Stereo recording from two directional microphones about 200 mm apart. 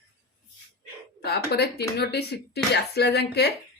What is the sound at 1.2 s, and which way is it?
Speech, 55° left (ahead or behind).